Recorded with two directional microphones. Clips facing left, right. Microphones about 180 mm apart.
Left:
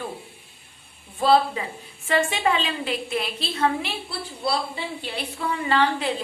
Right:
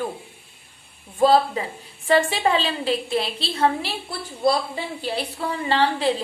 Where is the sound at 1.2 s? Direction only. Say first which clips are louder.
Right 2 dB; 40° right (ahead or behind).